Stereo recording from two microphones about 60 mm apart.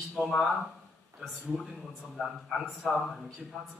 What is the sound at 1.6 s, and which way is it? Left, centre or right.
A man's voice, centre.